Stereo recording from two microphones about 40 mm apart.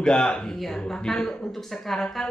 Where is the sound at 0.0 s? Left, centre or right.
Left.